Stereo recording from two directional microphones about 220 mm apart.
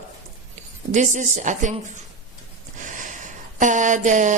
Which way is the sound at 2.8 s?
35° right (ahead or behind).